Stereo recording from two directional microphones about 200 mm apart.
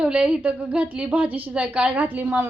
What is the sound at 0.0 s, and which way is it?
A woman's voice, 5° right (ahead or behind).